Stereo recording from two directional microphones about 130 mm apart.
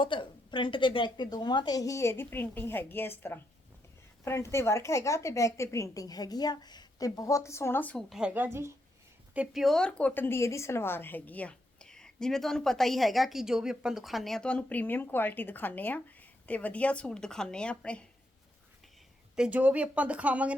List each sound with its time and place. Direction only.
0.0 s a woman's voice: 40° left (ahead or behind); by 8.0 s 10° left (ahead or behind)
8.1 s a woman's voice: 10° right (ahead or behind); by 18.0 s 10° left (ahead or behind)
19.4 s speech: 10° right (ahead or behind)